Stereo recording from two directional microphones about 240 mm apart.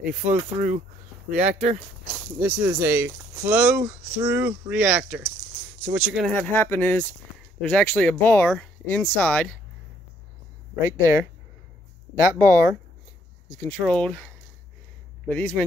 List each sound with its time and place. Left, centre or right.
0.2 s speech: right
2.4 s speech: centre
11.0 s speech: centre
13.6 s speech: centre